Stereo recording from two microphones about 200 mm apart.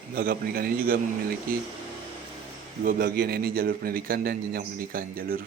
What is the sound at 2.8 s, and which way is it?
Speech, 45° right (ahead or behind).